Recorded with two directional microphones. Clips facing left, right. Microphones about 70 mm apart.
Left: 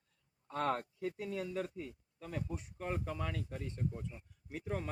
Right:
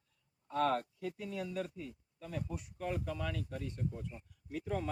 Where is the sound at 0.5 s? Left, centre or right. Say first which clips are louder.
Right 3 dB; left.